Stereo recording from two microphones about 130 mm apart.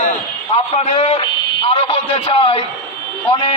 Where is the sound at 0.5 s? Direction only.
50° left (ahead or behind).